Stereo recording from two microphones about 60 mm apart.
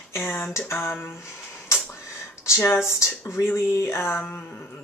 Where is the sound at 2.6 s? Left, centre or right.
Left.